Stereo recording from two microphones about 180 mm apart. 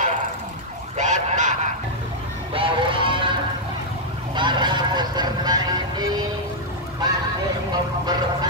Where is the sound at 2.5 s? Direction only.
30° right (ahead or behind).